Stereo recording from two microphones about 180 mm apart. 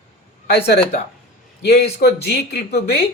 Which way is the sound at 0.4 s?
65° left (ahead or behind).